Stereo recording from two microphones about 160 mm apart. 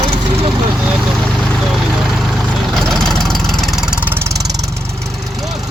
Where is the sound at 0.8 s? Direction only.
Centre (ahead or behind).